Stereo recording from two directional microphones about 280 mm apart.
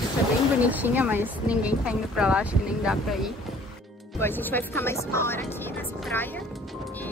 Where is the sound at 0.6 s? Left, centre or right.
Centre.